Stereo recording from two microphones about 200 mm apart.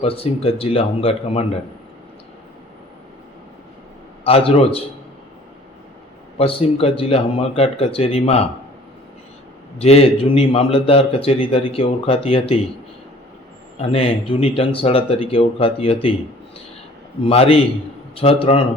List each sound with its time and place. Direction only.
0.0 s a man's voice: 30° left (ahead or behind)
4.2 s a man's voice: 30° left (ahead or behind)
6.4 s a man's voice: 30° left (ahead or behind)
9.7 s a man's voice: 30° left (ahead or behind)
13.7 s a man's voice: 30° left (ahead or behind)
17.2 s a man's voice: 30° left (ahead or behind)